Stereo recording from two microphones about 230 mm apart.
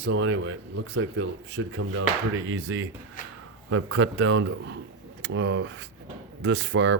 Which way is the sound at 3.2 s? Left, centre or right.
Left.